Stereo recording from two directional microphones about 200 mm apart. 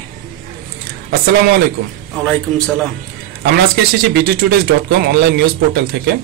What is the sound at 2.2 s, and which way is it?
Speech, centre (ahead or behind).